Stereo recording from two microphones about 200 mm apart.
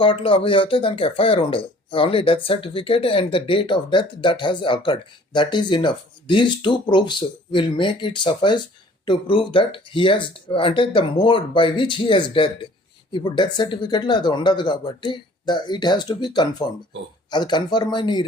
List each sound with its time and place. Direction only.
0.0 s speech: 25° left (ahead or behind)